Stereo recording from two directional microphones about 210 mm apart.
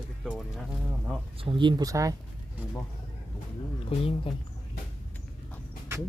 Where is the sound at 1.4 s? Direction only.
25° right (ahead or behind).